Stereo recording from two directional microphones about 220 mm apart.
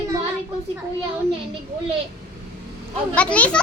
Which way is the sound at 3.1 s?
5° left (ahead or behind).